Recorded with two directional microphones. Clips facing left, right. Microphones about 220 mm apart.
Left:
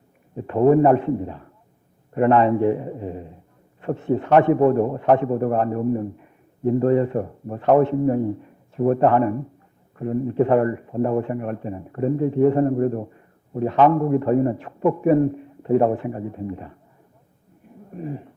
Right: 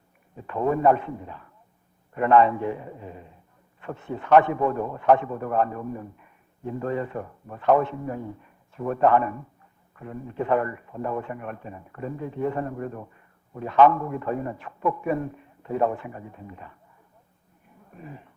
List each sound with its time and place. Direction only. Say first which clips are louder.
0.3 s a man's voice: left 9 dB; 30° left (ahead or behind)
17.9 s a man's voice: left 12 dB; 35° left (ahead or behind)